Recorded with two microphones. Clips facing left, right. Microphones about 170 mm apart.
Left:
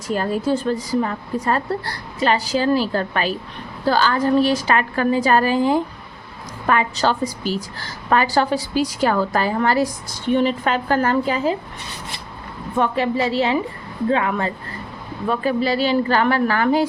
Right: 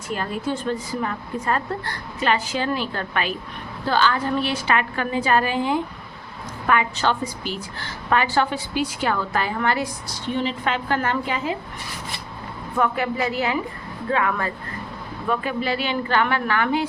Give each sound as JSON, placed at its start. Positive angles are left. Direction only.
{"t": 0.1, "sound": "a woman's voice", "side_deg": 40}
{"t": 12.7, "sound": "a woman's voice", "side_deg": 25}
{"t": 15.3, "sound": "a woman's voice", "side_deg": 35}